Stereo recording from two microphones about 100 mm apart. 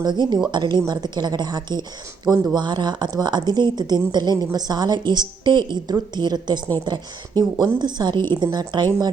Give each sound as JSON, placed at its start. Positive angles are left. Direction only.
{"t": 0.0, "sound": "speech", "side_deg": -45}